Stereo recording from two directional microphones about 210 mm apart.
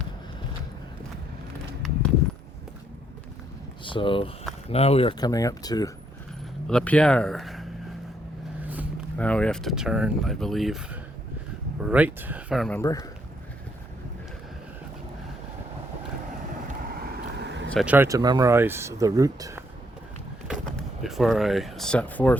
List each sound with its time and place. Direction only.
3.8 s speech: 25° left (ahead or behind)
6.7 s speech: 5° left (ahead or behind)
8.6 s a sound: 10° right (ahead or behind)
9.1 s speech: 5° left (ahead or behind)
12.8 s speech: 15° left (ahead or behind)
16.8 s vehicle: 45° right (ahead or behind)
17.7 s speech: 5° right (ahead or behind)
20.7 s speech: centre (ahead or behind)